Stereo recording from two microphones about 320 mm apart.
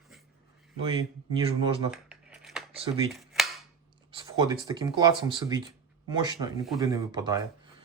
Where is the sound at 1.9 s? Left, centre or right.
Centre.